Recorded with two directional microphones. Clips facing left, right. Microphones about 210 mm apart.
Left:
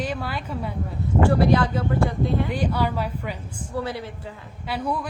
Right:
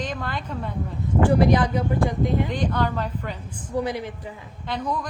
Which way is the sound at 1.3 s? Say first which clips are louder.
Right 2 dB; 15° right (ahead or behind).